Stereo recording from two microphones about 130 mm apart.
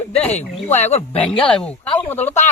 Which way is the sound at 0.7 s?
60° left (ahead or behind).